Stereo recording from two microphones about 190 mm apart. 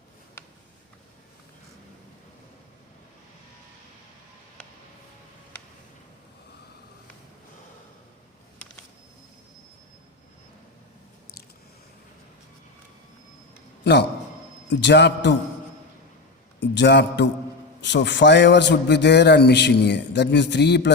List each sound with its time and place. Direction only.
14.7 s a man's voice: 65° left (ahead or behind)
16.6 s a man's voice: 65° left (ahead or behind)